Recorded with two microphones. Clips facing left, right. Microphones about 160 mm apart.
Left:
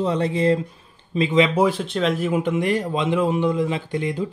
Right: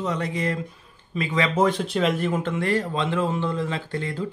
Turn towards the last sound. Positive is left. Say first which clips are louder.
# left 4 dB
turn(degrees=15)  # may be behind; listen again after turning